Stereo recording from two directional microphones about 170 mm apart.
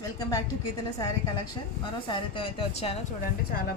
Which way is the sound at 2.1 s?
35° left (ahead or behind).